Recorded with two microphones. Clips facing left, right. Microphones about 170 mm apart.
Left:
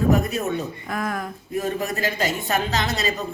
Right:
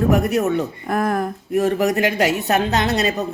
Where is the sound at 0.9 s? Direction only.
50° right (ahead or behind).